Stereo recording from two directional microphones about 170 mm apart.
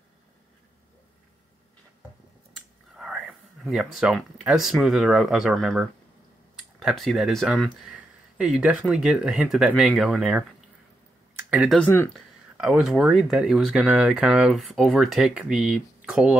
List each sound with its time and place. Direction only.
2.9 s speech: centre (ahead or behind)
11.5 s speech: 5° right (ahead or behind)
11.8 s speech: 10° left (ahead or behind)
12.5 s speech: 5° right (ahead or behind)